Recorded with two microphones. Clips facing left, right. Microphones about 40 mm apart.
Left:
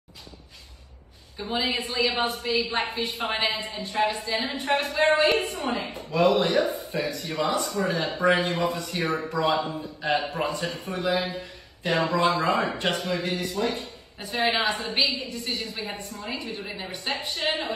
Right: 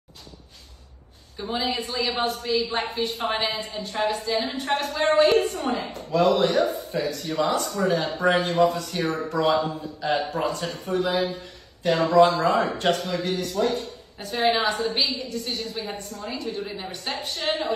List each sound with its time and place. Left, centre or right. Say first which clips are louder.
1.6 s a woman's voice: left 2 dB; left
5.9 s speech: right 1 dB; left
6.3 s a woman's voice: right 1 dB; centre
6.6 s a man's voice: right 2 dB; left
9.7 s a man's voice: right 1 dB; left
14.2 s a woman's voice: right 2 dB; centre
14.7 s speech: right 1 dB; left
16.6 s a woman's voice: right 2 dB; centre
16.9 s speech: left 1 dB; left